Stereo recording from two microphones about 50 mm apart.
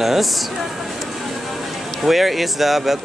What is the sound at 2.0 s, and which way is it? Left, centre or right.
Speech, centre.